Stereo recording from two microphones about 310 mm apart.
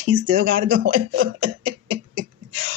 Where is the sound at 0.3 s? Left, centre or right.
Right.